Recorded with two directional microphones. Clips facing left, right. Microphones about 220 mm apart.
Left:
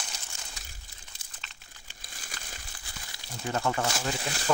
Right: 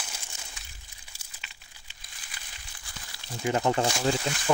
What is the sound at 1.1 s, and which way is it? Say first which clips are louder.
Crumpling: right 1 dB; 10° right (ahead or behind).